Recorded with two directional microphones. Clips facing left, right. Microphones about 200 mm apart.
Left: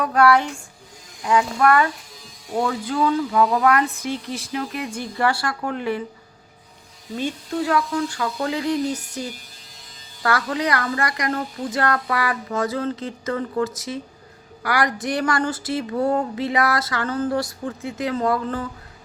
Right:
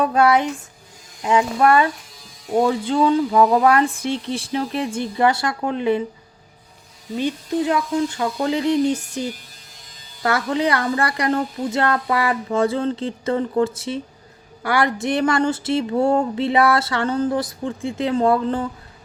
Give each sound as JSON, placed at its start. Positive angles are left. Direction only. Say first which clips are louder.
{"t": 0.0, "sound": "speech", "louder": "right 1 dB", "side_deg": -25}
{"t": 7.2, "sound": "speech", "louder": "right 3 dB", "side_deg": -20}
{"t": 10.2, "sound": "speech", "louder": "right 2 dB", "side_deg": -25}